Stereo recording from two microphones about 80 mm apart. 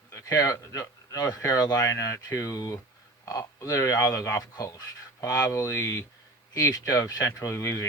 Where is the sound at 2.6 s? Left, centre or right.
Left.